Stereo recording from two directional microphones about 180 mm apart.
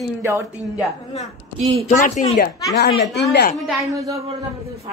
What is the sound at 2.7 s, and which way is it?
Speech, 65° left (ahead or behind).